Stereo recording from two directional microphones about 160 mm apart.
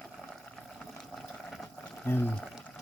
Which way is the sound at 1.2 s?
Centre (ahead or behind).